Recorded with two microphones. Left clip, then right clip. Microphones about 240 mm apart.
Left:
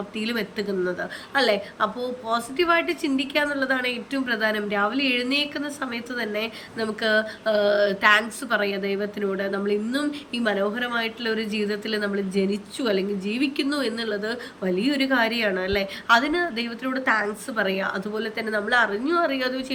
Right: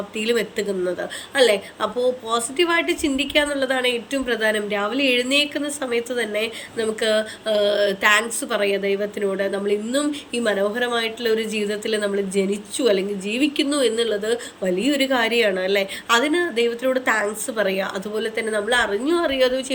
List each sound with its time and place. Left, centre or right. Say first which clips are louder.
0.2 s a woman's voice: right 7 dB; centre